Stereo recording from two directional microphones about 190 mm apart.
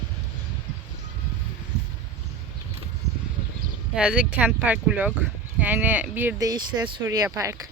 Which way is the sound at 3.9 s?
5° right (ahead or behind).